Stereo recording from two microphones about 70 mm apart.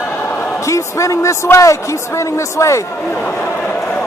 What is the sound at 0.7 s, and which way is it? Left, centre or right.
Speech, left.